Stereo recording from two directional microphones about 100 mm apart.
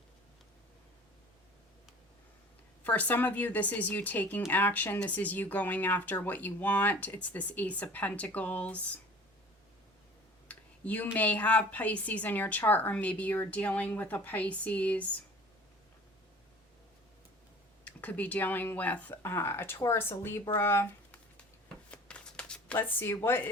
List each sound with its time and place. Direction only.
2.8 s a woman's voice: 15° left (ahead or behind)
10.5 s a woman's voice: 15° left (ahead or behind)
17.8 s a woman's voice: 15° left (ahead or behind)
21.8 s shuffling cards: 10° left (ahead or behind)
22.8 s speech: 20° left (ahead or behind)